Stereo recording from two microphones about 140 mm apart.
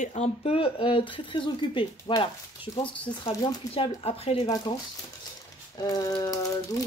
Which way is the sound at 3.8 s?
45° left (ahead or behind).